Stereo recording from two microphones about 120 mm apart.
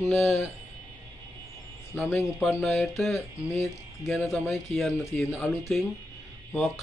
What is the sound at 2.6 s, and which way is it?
Speech, centre (ahead or behind).